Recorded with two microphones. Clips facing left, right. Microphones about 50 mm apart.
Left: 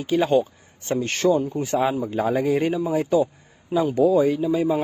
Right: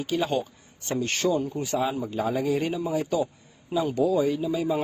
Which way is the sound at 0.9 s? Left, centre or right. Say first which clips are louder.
Left 5 dB; left.